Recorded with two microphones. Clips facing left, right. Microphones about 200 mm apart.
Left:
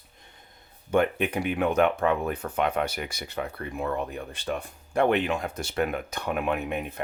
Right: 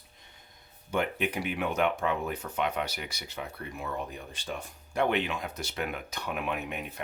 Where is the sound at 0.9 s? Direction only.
50° left (ahead or behind).